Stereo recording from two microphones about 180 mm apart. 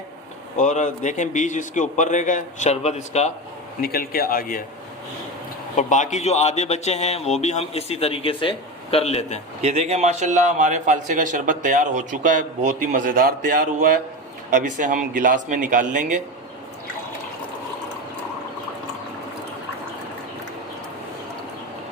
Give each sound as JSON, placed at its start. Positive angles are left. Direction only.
{"t": 0.5, "sound": "a man's voice", "side_deg": 45}
{"t": 3.8, "sound": "speech", "side_deg": 55}
{"t": 5.7, "sound": "a man's voice", "side_deg": 40}
{"t": 9.6, "sound": "a man's voice", "side_deg": -35}